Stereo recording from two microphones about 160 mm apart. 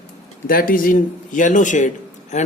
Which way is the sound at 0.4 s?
60° left (ahead or behind).